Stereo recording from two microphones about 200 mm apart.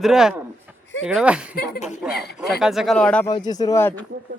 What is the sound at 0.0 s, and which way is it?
Speech, 5° right (ahead or behind).